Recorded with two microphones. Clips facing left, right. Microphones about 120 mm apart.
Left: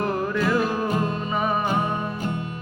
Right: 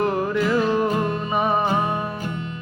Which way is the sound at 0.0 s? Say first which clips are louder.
Right 2 dB; 20° right (ahead or behind).